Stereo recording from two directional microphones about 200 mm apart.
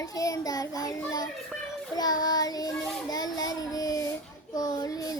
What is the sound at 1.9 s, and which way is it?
Child singing, 20° left (ahead or behind).